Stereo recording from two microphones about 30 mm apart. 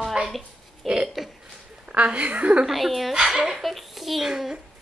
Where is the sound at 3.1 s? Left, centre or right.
Centre.